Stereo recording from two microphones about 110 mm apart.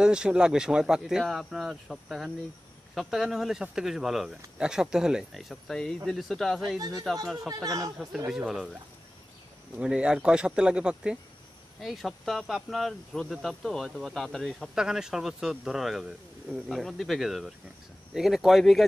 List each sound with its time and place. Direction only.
0.0 s speech: 5° right (ahead or behind)
6.8 s speech: 30° right (ahead or behind)
8.3 s speech: 5° right (ahead or behind)
9.8 s speech: 10° right (ahead or behind)